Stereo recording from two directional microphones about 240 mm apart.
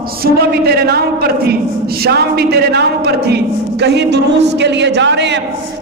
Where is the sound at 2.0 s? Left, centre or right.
Right.